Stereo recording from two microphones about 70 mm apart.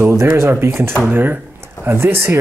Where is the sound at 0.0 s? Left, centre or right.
Right.